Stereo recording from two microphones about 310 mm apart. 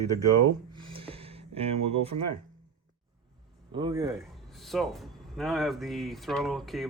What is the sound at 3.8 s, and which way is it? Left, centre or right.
Speech, centre.